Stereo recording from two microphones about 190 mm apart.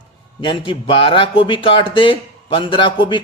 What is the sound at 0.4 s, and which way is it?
Speech, 25° left (ahead or behind).